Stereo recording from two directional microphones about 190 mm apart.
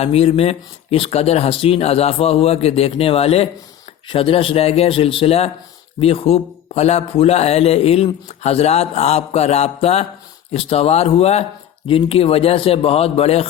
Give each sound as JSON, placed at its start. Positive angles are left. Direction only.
{"t": 0.0, "sound": "a man's voice", "side_deg": 35}